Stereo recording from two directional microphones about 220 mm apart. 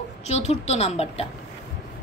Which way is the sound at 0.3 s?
30° left (ahead or behind).